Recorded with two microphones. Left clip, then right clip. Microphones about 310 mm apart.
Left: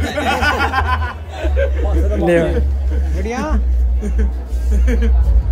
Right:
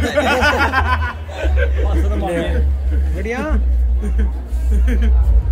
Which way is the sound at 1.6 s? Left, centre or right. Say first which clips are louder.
Left 5 dB; left.